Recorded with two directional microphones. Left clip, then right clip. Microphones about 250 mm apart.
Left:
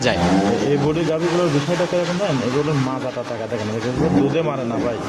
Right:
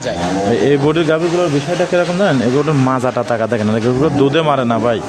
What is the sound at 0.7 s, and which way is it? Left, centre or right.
Speech, right.